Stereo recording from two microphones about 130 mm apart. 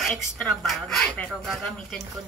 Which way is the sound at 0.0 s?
5° left (ahead or behind).